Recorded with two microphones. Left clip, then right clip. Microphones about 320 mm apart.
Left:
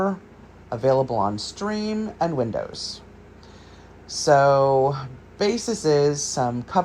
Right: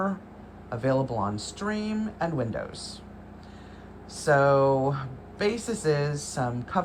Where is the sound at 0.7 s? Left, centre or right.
Centre.